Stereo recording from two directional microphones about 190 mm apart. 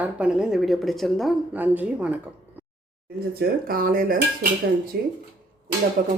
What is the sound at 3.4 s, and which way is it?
Speech, 50° right (ahead or behind).